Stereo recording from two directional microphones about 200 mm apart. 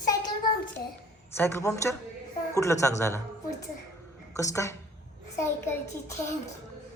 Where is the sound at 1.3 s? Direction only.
10° left (ahead or behind).